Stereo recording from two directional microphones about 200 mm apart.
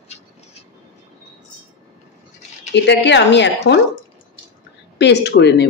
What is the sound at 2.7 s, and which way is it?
Speech, 60° left (ahead or behind).